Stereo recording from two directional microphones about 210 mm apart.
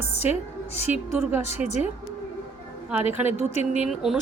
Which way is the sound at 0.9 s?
10° right (ahead or behind).